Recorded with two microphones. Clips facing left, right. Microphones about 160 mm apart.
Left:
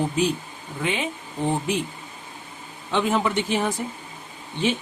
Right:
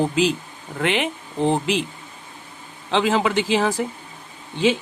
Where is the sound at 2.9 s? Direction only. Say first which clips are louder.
Right 3 dB; 90° right.